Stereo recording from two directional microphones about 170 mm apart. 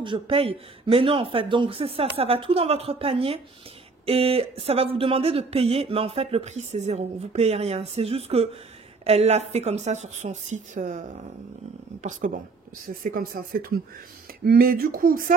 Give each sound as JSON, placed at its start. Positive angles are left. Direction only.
{"t": 0.0, "sound": "speech", "side_deg": -30}
{"t": 12.0, "sound": "speech", "side_deg": -50}